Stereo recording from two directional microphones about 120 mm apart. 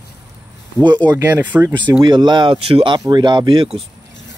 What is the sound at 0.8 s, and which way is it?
Speech, 40° right (ahead or behind).